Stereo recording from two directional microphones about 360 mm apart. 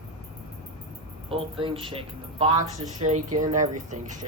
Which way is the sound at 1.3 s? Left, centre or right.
Centre.